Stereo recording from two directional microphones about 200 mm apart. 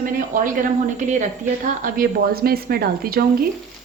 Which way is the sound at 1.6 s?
45° right (ahead or behind).